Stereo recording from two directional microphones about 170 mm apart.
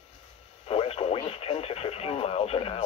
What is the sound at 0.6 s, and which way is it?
Speech, 35° left (ahead or behind).